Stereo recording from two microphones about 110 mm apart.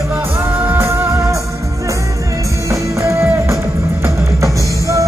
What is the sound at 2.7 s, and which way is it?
Music, 25° right (ahead or behind).